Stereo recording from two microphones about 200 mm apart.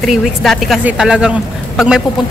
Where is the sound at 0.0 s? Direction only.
Centre (ahead or behind).